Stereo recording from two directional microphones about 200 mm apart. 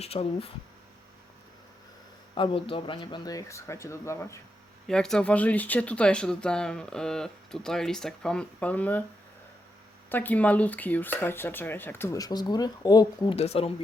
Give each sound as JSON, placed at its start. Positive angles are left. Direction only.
{"t": 0.0, "sound": "speech", "side_deg": 30}
{"t": 2.3, "sound": "speech", "side_deg": 25}
{"t": 4.9, "sound": "speech", "side_deg": 5}
{"t": 10.1, "sound": "speech", "side_deg": 10}